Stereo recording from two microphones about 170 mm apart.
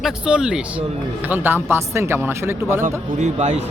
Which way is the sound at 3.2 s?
40° right (ahead or behind).